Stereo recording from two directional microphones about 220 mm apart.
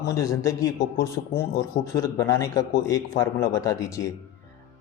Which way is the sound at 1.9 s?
15° left (ahead or behind).